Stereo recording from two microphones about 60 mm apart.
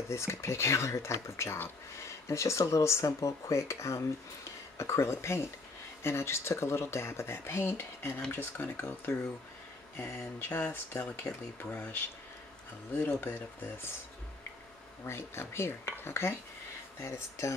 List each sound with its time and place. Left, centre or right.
0.1 s speech: left
13.0 s speech: left
15.0 s speech: left